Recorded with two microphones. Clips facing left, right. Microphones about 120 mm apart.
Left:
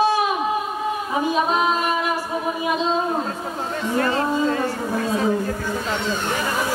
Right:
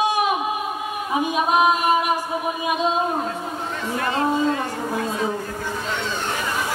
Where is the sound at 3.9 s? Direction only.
40° left (ahead or behind).